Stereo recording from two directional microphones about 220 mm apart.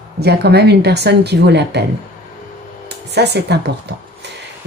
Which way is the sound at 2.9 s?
50° right (ahead or behind).